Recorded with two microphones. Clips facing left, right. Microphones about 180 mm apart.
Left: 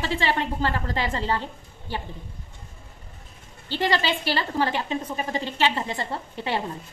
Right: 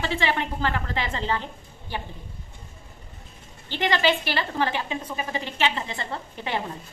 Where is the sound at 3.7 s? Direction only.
35° left (ahead or behind).